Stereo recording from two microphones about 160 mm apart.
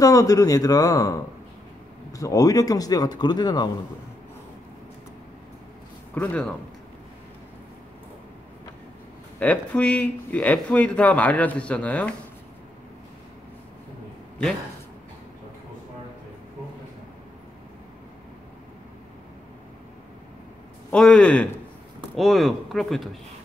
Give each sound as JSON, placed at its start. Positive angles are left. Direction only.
{"t": 0.0, "sound": "speech", "side_deg": 20}
{"t": 6.1, "sound": "speech", "side_deg": 5}
{"t": 9.4, "sound": "speech", "side_deg": 10}
{"t": 20.9, "sound": "speech", "side_deg": 5}